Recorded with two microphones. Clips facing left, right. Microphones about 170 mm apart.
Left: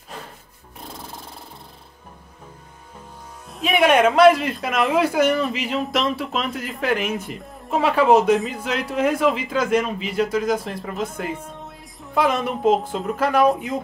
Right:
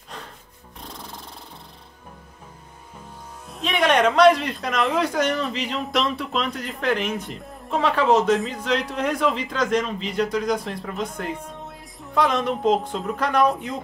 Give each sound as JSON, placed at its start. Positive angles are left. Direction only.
{"t": 3.4, "sound": "speech", "side_deg": 5}